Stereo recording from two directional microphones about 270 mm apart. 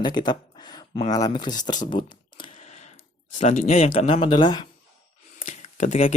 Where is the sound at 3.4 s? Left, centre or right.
Left.